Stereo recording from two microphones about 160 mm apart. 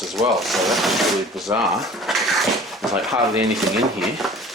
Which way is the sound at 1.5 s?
20° right (ahead or behind).